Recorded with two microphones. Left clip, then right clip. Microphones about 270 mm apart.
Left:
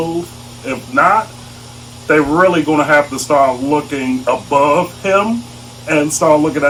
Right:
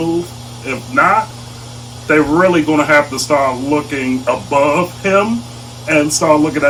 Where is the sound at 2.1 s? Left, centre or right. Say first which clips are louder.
Even; centre.